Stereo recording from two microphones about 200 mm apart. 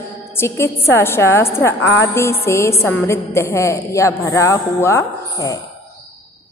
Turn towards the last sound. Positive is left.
turn(degrees=15)  # may be behind; listen again after turning